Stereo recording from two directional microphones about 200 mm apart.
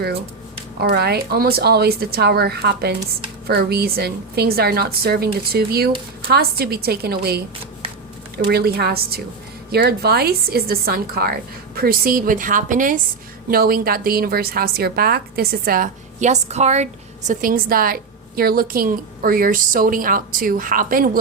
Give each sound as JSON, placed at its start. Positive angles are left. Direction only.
{"t": 0.8, "sound": "a woman's voice", "side_deg": -50}
{"t": 8.4, "sound": "a woman's voice", "side_deg": -50}